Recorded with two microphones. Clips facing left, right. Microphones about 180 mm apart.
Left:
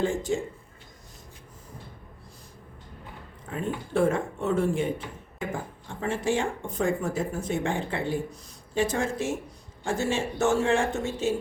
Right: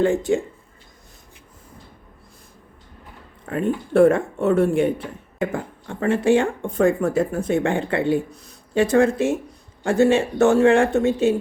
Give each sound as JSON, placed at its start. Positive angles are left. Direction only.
{"t": 0.0, "sound": "speech", "side_deg": -65}
{"t": 3.4, "sound": "speech", "side_deg": -65}